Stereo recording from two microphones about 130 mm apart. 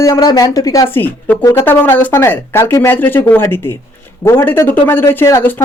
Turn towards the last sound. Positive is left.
turn(degrees=15)  # may be behind; listen again after turning